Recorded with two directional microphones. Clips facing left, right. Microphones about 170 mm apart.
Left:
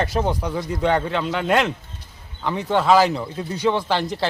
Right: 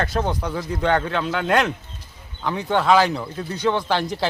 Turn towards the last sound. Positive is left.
turn(degrees=0)  # may be behind; listen again after turning